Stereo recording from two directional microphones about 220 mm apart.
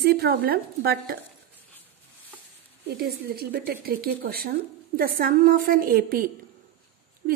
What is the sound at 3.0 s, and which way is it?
A woman's voice, 45° right (ahead or behind).